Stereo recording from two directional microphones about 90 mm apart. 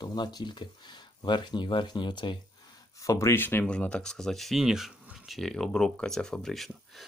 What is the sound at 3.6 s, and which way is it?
Speech, 10° left (ahead or behind).